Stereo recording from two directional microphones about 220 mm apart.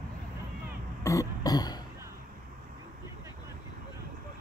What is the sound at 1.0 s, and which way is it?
Throat clearing, 15° left (ahead or behind).